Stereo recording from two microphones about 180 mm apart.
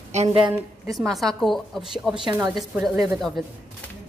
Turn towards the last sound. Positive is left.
turn(degrees=0)  # may be behind; listen again after turning